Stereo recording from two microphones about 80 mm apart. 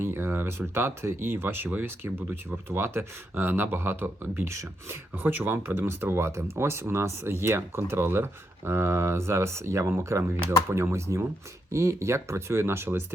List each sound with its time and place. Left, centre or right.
0.0 s speech: right